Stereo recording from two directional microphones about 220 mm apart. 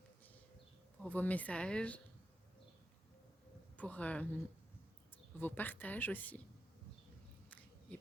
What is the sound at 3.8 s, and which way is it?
Speech, 5° left (ahead or behind).